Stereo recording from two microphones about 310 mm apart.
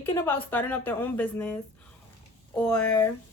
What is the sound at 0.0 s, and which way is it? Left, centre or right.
A woman's voice, centre.